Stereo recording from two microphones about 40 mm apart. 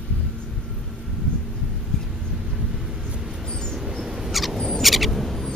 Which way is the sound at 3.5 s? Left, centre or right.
Centre.